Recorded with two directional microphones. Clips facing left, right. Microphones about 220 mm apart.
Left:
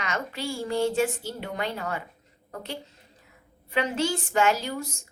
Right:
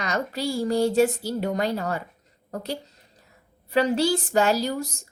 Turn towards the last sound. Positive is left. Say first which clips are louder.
# right 6 dB
turn(degrees=-40)  # may be behind; listen again after turning